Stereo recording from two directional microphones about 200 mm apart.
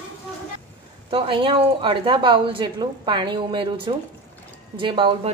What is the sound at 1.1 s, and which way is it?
A woman's voice, 25° right (ahead or behind).